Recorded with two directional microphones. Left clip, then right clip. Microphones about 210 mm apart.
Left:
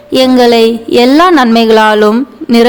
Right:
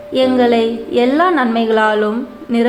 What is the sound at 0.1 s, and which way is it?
Speech, 50° left (ahead or behind).